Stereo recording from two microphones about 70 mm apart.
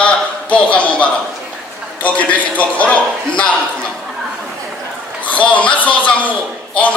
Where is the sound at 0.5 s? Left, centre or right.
Centre.